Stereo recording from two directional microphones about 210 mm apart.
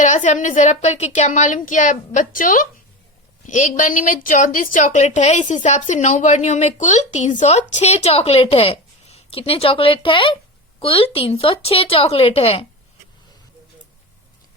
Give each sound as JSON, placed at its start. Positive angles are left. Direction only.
{"t": 0.0, "sound": "a woman's voice", "side_deg": 35}